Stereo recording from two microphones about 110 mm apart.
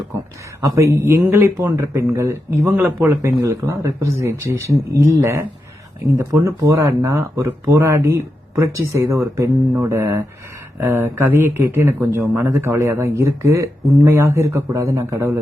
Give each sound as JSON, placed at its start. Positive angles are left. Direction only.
{"t": 0.6, "sound": "speech", "side_deg": -25}